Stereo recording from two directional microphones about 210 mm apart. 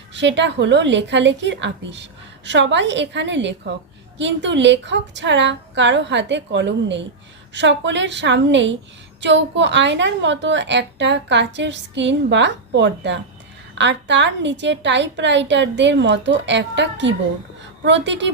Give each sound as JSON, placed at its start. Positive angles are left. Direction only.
{"t": 0.1, "sound": "a woman's voice", "side_deg": -55}